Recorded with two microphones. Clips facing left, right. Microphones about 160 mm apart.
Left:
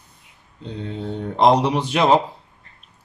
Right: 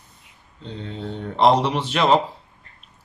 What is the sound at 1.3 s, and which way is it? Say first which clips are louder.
Speech: left 1 dB; 15° left (ahead or behind).